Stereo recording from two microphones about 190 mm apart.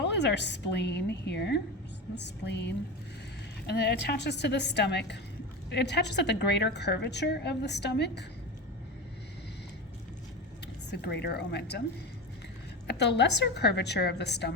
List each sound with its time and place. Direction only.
0.0 s a woman's voice: 65° left (ahead or behind)
10.9 s a woman's voice: 60° left (ahead or behind)
12.9 s a woman's voice: 60° left (ahead or behind)